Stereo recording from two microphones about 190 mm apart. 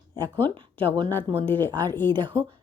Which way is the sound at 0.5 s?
25° right (ahead or behind).